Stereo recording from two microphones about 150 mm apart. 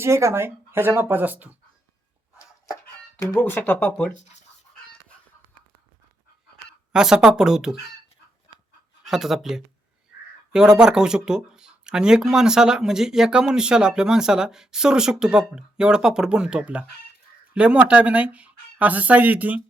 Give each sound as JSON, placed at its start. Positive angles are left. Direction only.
{"t": 0.0, "sound": "speech", "side_deg": -20}
{"t": 3.3, "sound": "speech", "side_deg": 15}
{"t": 4.1, "sound": "speech", "side_deg": 50}
{"t": 6.9, "sound": "speech", "side_deg": -5}
{"t": 9.0, "sound": "speech", "side_deg": 0}